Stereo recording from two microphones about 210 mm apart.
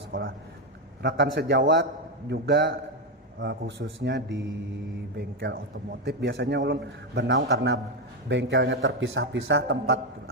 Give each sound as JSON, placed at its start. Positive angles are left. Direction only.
{"t": 0.1, "sound": "a man's voice", "side_deg": -70}
{"t": 1.0, "sound": "a man's voice", "side_deg": -55}